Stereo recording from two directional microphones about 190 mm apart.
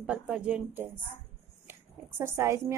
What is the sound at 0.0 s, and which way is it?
Speech, 5° right (ahead or behind).